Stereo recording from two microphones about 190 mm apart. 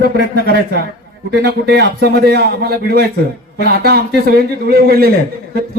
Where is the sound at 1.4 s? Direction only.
55° right (ahead or behind).